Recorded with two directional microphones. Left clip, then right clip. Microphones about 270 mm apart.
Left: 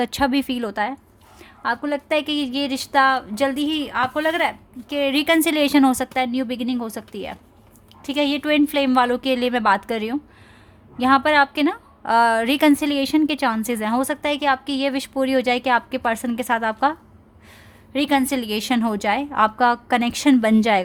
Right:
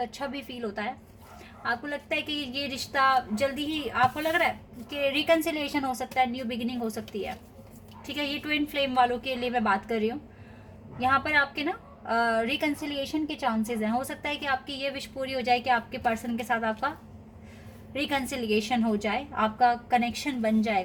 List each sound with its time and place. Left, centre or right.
0.0 s a woman's voice: left
8.0 s a woman's voice: left
17.9 s a woman's voice: left